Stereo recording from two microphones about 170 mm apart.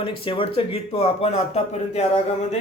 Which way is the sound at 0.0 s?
30° left (ahead or behind).